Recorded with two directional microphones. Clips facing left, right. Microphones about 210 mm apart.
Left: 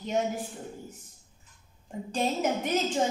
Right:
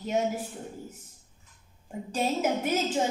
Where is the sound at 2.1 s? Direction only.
5° right (ahead or behind).